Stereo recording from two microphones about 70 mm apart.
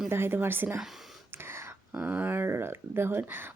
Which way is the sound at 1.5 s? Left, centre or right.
Right.